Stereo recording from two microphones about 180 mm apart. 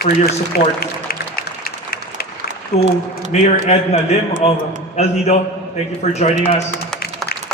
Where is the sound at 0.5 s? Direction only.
55° left (ahead or behind).